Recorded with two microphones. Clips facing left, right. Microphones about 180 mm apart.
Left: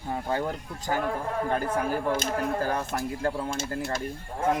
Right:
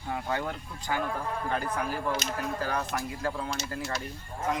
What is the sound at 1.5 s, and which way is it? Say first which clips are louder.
Speech: left 4 dB; 50° left (ahead or behind).